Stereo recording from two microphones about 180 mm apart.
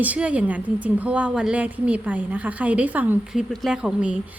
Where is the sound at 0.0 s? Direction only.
10° right (ahead or behind).